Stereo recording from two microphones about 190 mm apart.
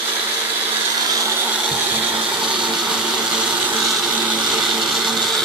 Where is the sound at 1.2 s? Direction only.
10° right (ahead or behind).